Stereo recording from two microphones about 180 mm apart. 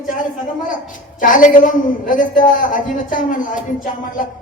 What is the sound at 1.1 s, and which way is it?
A woman's voice, 45° left (ahead or behind).